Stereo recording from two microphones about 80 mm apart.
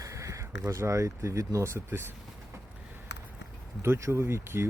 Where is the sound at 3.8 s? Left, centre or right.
Right.